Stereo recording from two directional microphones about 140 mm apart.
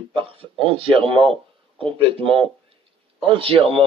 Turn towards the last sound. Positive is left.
turn(degrees=-40)  # may be behind; listen again after turning